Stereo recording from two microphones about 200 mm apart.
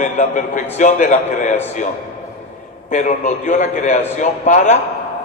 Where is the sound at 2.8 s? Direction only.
40° left (ahead or behind).